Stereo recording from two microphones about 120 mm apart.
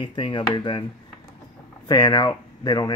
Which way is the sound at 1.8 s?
35° left (ahead or behind).